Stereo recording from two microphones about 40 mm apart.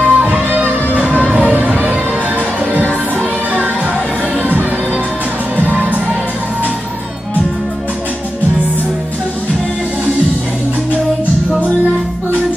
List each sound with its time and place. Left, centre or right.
0.0 s music: right
4.4 s music: right
5.7 s music: right